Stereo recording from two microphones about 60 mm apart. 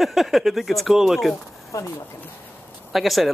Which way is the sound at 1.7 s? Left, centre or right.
Left.